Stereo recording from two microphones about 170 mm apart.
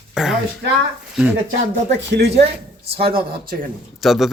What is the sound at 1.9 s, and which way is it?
Speech, 85° right.